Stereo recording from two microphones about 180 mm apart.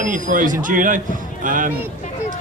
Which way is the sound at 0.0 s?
45° right (ahead or behind).